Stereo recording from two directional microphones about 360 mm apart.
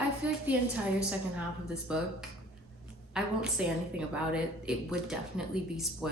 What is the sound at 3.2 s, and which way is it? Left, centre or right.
Speech, centre.